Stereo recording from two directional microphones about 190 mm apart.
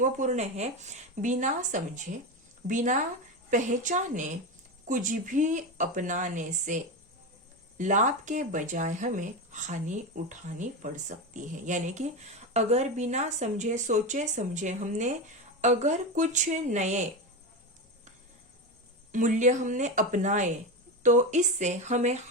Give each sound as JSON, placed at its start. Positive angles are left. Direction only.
{"t": 0.0, "sound": "speech", "side_deg": -40}
{"t": 19.1, "sound": "speech", "side_deg": -40}